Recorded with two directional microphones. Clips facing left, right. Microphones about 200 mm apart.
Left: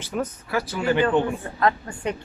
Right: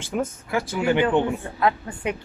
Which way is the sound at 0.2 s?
20° right (ahead or behind).